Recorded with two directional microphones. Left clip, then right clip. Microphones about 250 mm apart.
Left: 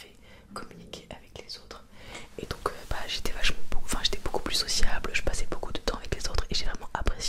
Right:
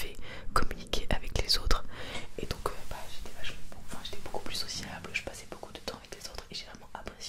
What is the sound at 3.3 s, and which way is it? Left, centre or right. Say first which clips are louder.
Whispering: left 12 dB; left.